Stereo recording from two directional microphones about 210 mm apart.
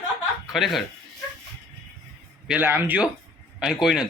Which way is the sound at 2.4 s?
5° right (ahead or behind).